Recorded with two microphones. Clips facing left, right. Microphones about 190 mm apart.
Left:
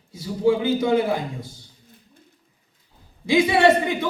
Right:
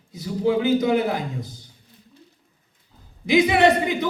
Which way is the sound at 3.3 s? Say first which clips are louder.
Even; 20° right (ahead or behind).